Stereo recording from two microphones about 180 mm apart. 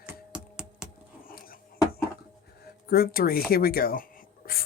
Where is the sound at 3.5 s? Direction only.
55° left (ahead or behind).